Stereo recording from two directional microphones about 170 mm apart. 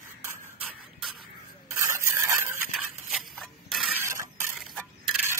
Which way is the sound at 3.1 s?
Centre (ahead or behind).